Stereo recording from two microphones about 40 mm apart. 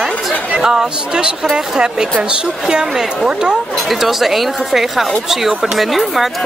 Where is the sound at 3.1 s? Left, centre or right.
Centre.